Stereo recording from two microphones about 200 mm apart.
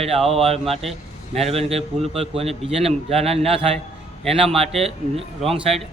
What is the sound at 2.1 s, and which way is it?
A man's voice, 30° right (ahead or behind).